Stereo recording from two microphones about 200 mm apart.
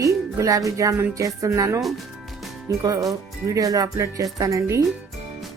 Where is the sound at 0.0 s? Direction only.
15° right (ahead or behind).